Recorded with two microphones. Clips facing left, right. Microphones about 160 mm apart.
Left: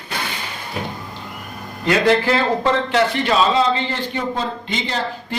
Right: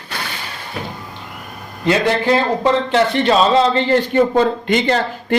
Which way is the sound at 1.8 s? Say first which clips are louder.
Right 1 dB; 20° right (ahead or behind).